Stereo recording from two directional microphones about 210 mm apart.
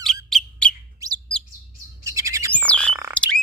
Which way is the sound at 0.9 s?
15° right (ahead or behind).